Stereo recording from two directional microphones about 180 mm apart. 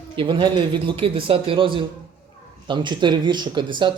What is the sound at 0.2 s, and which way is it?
Speech, 25° right (ahead or behind).